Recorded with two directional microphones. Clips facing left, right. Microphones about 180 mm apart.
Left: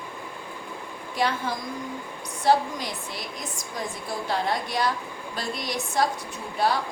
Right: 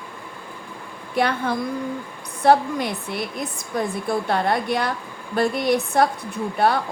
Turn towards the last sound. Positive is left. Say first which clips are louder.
# right 5 dB
turn(degrees=-60)  # may be behind; listen again after turning